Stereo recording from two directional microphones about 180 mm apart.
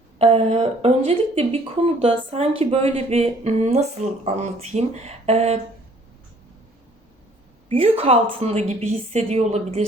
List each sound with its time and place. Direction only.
0.2 s speech: 35° right (ahead or behind)
7.7 s speech: 35° right (ahead or behind)